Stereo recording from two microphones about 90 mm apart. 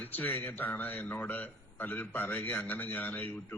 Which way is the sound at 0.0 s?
20° left (ahead or behind).